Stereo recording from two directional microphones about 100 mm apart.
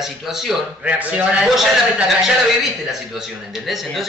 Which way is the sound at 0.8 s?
15° right (ahead or behind).